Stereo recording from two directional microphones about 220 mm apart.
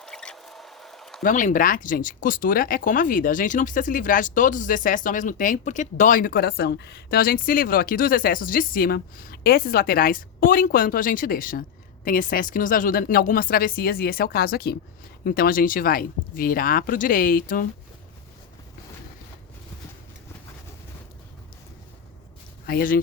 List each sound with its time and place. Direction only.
0.0 s a sound: 5° left (ahead or behind)
1.2 s speech: 35° left (ahead or behind)
22.6 s speech: 40° left (ahead or behind)